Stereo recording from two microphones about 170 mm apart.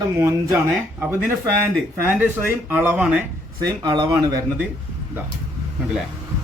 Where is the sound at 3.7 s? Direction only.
25° right (ahead or behind).